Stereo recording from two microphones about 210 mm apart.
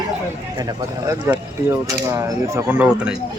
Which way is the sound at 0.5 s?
15° right (ahead or behind).